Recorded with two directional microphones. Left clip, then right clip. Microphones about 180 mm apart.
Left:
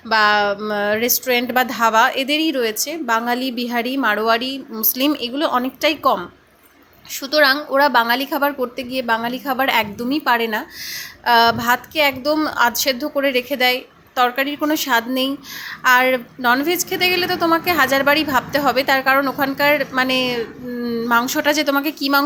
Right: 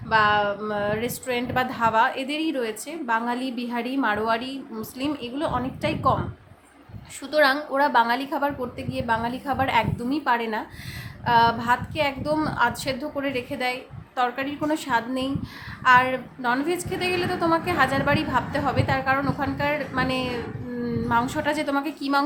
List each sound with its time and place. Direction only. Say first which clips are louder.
0.1 s a woman's voice: left 5 dB; 25° left (ahead or behind)
7.2 s a woman's voice: left 5 dB; 20° left (ahead or behind)